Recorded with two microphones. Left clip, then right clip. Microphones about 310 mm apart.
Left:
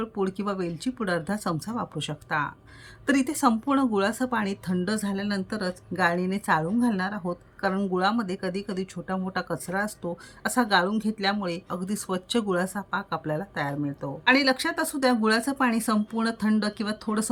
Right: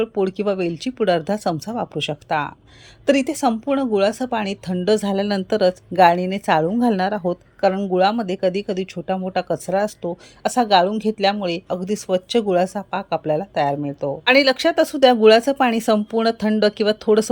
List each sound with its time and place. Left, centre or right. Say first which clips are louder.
0.0 s speech: right 9 dB; centre